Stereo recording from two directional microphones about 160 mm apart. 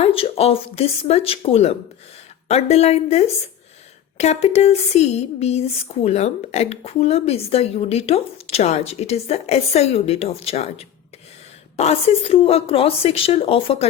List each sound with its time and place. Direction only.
0.0 s speech: 35° left (ahead or behind)